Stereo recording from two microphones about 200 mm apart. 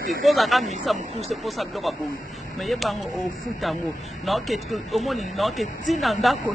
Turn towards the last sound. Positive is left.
turn(degrees=0)  # may be behind; listen again after turning